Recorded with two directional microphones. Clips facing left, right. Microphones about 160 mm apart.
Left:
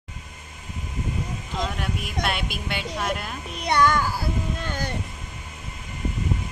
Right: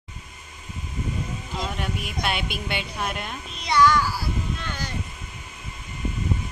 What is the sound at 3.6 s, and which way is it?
Child singing, 55° left (ahead or behind).